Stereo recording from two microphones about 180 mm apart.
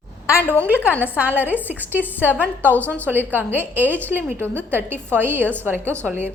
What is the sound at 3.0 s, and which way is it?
A woman's voice, 10° right (ahead or behind).